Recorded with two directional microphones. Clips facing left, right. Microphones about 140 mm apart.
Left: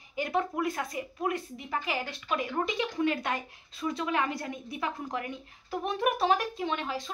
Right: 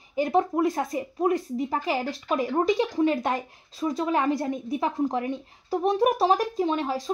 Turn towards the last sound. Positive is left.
turn(degrees=-35)  # may be behind; listen again after turning